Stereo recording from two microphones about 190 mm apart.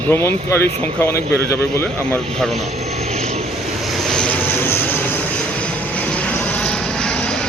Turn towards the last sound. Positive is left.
turn(degrees=5)  # may be behind; listen again after turning